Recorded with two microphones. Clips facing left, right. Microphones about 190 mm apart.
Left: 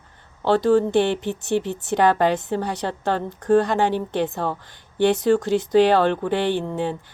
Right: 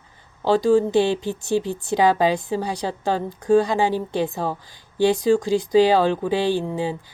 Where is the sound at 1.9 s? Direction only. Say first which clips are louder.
Even; 10° right (ahead or behind).